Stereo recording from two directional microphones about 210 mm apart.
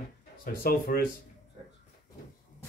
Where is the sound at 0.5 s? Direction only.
45° left (ahead or behind).